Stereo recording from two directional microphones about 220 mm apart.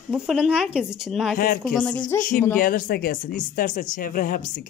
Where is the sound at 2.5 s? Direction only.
40° left (ahead or behind).